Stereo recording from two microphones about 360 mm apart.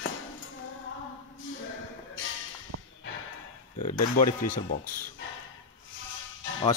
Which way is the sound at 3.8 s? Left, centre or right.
Left.